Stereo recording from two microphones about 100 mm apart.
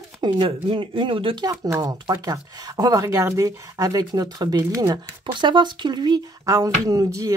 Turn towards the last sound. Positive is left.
turn(degrees=-30)  # may be behind; listen again after turning